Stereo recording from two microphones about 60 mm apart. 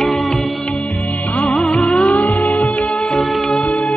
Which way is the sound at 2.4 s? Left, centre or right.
Centre.